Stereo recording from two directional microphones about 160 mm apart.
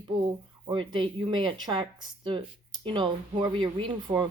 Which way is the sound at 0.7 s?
30° right (ahead or behind).